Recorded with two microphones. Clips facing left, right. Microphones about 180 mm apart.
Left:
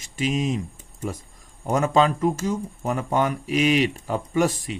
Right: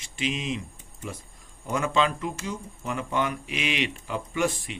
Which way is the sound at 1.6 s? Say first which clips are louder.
Left 5 dB; 40° left (ahead or behind).